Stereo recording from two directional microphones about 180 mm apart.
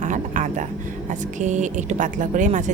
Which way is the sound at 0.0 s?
45° right (ahead or behind).